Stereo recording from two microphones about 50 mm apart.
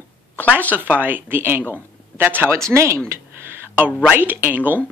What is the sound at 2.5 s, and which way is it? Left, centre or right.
Speech, right.